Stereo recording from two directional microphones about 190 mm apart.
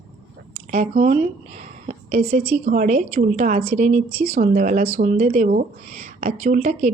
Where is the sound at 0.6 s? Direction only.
35° right (ahead or behind).